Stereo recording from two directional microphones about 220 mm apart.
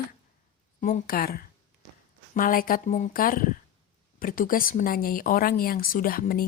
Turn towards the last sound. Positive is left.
turn(degrees=40)  # may be behind; listen again after turning